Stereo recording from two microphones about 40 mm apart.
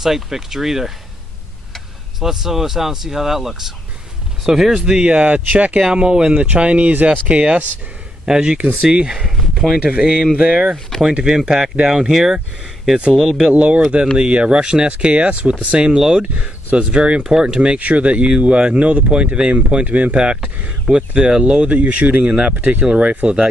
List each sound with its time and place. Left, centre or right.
0.0 s speech: centre
2.1 s speech: centre
5.0 s speech: right
5.9 s speech: right
8.3 s speech: centre
9.8 s speech: right
13.5 s speech: right
15.9 s speech: centre
17.6 s speech: right
19.5 s speech: right
20.9 s speech: right